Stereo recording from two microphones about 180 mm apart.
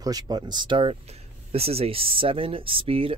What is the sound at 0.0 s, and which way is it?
Speech, 20° right (ahead or behind).